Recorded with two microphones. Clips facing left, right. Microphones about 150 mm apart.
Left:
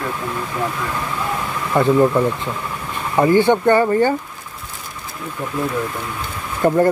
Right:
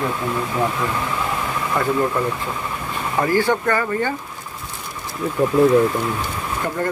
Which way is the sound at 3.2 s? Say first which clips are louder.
Left 5 dB; 20° left (ahead or behind).